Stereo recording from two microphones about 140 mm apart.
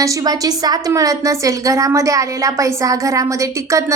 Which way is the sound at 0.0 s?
25° right (ahead or behind).